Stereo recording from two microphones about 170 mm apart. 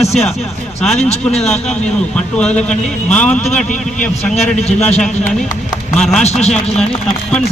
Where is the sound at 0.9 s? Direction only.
40° left (ahead or behind).